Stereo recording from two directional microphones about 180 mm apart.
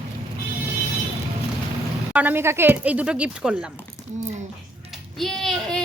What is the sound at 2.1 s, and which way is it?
Speech, 10° right (ahead or behind).